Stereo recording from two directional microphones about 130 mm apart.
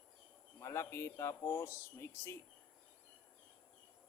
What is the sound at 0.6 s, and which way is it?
A man's voice, 20° left (ahead or behind).